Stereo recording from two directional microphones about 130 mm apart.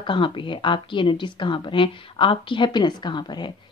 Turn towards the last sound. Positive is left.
turn(degrees=35)  # may be behind; listen again after turning